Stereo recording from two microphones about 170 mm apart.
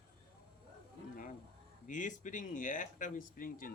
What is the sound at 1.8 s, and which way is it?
Speech, 50° left (ahead or behind).